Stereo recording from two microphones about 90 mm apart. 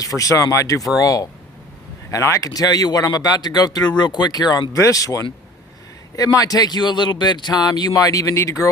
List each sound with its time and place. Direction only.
0.0 s speech: 40° left (ahead or behind)